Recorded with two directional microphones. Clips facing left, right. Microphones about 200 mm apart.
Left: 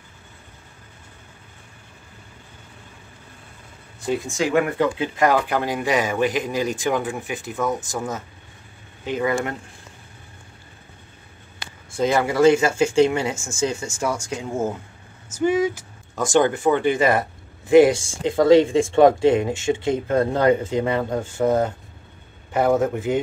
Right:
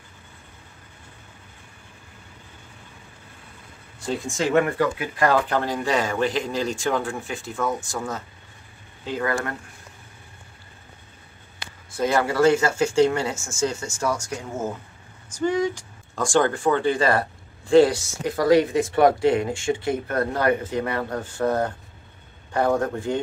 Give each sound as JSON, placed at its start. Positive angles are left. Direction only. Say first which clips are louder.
{"t": 4.3, "sound": "speech", "louder": "right 1 dB", "side_deg": 0}
{"t": 4.7, "sound": "speech", "louder": "left 2 dB", "side_deg": 25}
{"t": 12.0, "sound": "speech", "louder": "left 2 dB", "side_deg": 15}
{"t": 15.2, "sound": "speech", "louder": "left 3 dB", "side_deg": 5}
{"t": 16.3, "sound": "speech", "louder": "left 2 dB", "side_deg": 20}